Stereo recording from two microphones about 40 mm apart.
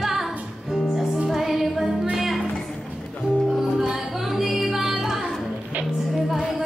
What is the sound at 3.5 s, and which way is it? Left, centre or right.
Music, centre.